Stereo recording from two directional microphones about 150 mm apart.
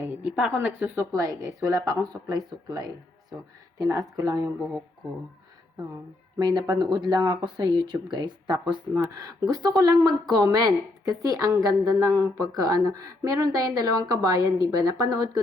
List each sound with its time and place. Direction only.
0.0 s speech: 10° right (ahead or behind)
6.3 s speech: 25° right (ahead or behind)